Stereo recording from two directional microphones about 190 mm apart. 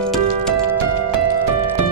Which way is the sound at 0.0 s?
5° left (ahead or behind).